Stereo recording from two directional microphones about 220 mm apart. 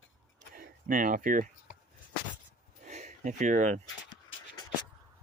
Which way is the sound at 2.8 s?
35° right (ahead or behind).